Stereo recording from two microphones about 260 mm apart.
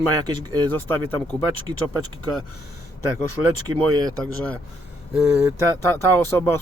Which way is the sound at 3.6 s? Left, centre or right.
Centre.